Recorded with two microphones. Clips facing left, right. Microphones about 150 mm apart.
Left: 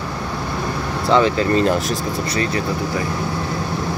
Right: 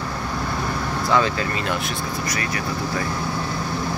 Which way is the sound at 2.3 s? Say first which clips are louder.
Left 6 dB; 25° left (ahead or behind).